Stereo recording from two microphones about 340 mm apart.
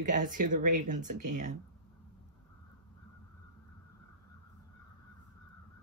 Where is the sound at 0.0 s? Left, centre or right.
Right.